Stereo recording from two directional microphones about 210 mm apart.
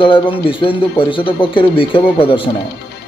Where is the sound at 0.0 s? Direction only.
25° left (ahead or behind).